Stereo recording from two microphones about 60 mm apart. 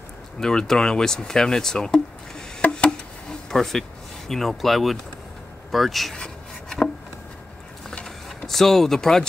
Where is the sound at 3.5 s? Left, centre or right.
Centre.